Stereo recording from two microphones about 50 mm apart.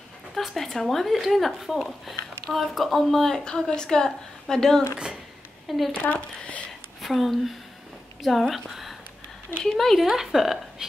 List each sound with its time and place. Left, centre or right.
0.3 s a woman's voice: centre
4.9 s speech: centre
5.7 s speech: centre
7.0 s a woman's voice: centre